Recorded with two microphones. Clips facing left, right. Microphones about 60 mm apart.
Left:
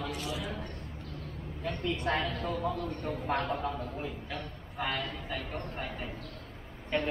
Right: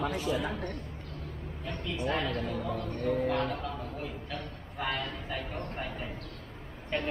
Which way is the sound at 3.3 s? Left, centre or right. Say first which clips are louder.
Right 1 dB; left.